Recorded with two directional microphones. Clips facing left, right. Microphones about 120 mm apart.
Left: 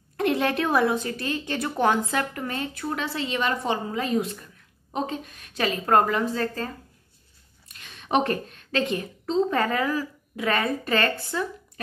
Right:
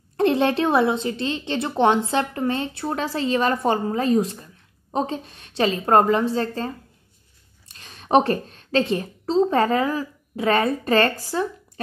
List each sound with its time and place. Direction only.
0.2 s a woman's voice: 30° right (ahead or behind)